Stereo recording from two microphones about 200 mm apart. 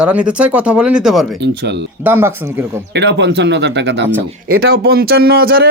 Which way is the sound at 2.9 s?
60° right (ahead or behind).